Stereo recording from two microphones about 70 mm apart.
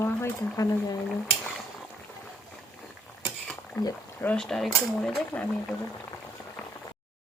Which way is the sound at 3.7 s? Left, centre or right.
Left.